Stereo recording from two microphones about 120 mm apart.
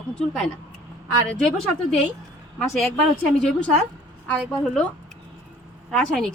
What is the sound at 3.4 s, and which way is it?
Speech, 5° left (ahead or behind).